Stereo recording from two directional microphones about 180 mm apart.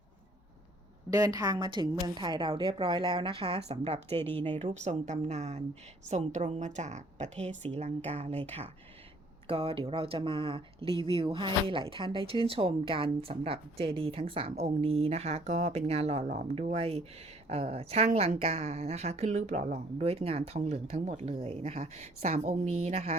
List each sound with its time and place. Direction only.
1.1 s a woman's voice: 20° right (ahead or behind)
4.2 s speech: 10° left (ahead or behind)
4.5 s speech: 40° right (ahead or behind)